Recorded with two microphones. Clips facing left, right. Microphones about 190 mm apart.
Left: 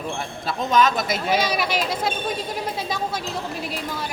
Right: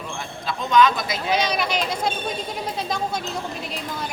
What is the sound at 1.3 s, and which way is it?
Speech, 5° left (ahead or behind).